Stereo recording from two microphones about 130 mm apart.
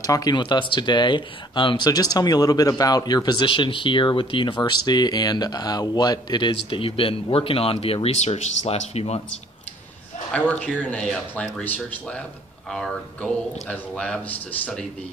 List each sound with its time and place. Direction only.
0.0 s speech: 30° left (ahead or behind); by 9.2 s 55° left (ahead or behind)
10.3 s speech: 10° left (ahead or behind)